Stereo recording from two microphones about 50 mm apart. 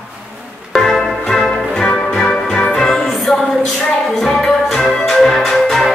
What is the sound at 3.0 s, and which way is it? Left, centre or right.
Music, centre.